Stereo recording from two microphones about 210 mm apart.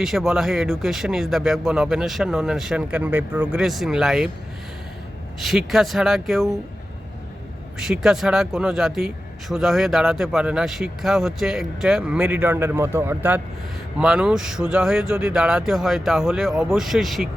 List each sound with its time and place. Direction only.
0.0 s speech: centre (ahead or behind)
5.4 s speech: centre (ahead or behind)
7.8 s speech: centre (ahead or behind)